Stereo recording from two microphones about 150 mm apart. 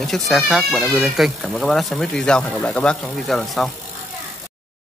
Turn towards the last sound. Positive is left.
turn(degrees=0)  # may be behind; listen again after turning